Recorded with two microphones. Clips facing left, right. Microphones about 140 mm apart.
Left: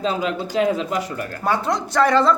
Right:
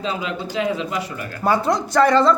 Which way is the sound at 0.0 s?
45° left (ahead or behind).